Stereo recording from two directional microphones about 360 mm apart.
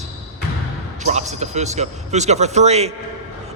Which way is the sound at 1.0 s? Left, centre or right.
Centre.